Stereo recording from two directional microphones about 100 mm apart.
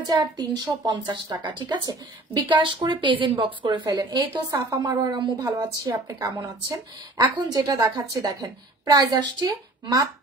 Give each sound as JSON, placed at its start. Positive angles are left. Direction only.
{"t": 0.0, "sound": "a woman's voice", "side_deg": -45}